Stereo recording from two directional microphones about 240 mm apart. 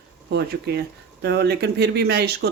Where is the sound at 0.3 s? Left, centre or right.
Right.